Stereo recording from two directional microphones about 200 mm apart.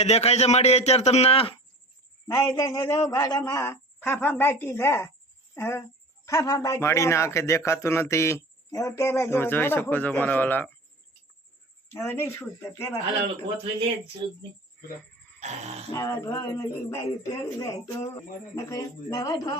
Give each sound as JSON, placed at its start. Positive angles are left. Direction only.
{"t": 0.0, "sound": "a man's voice", "side_deg": 30}
{"t": 2.2, "sound": "a man's voice", "side_deg": 15}
{"t": 11.9, "sound": "a man's voice", "side_deg": 10}
{"t": 15.4, "sound": "speech", "side_deg": -35}
{"t": 15.9, "sound": "a man's voice", "side_deg": 15}